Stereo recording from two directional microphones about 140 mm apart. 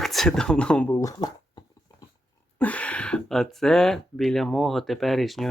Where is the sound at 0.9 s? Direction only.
25° left (ahead or behind).